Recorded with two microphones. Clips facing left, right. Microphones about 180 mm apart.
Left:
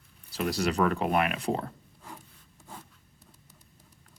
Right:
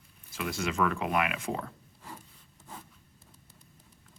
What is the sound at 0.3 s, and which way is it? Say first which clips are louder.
Speech: left 4 dB; 35° left (ahead or behind).